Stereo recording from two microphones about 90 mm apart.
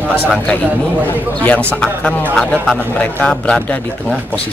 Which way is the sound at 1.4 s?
15° left (ahead or behind).